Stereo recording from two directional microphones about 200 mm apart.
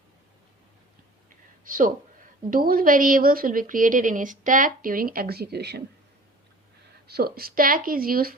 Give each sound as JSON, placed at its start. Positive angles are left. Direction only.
{"t": 1.6, "sound": "a woman's voice", "side_deg": -45}
{"t": 7.1, "sound": "a woman's voice", "side_deg": -50}